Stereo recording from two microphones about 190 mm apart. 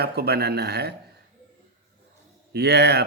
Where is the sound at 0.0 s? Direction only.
55° right (ahead or behind).